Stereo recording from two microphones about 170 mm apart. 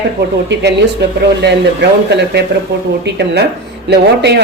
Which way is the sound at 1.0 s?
85° right.